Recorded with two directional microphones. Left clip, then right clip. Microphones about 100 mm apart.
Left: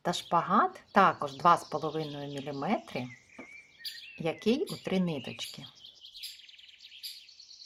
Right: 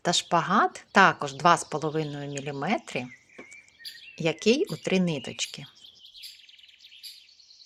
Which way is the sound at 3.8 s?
15° left (ahead or behind).